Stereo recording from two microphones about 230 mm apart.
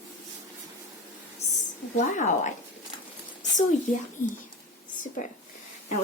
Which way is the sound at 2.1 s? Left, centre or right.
Left.